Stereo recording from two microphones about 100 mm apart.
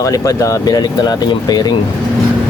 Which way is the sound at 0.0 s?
35° left (ahead or behind).